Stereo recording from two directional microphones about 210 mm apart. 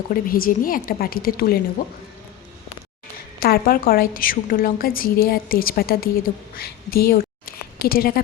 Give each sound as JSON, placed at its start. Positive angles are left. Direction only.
{"t": 0.1, "sound": "a woman's voice", "side_deg": 45}
{"t": 3.4, "sound": "a woman's voice", "side_deg": 45}